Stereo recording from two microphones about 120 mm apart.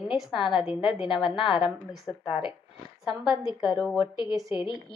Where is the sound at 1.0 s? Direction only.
45° left (ahead or behind).